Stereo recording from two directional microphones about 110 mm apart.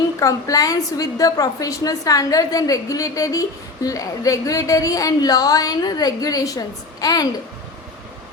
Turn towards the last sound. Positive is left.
turn(degrees=35)  # may be behind; listen again after turning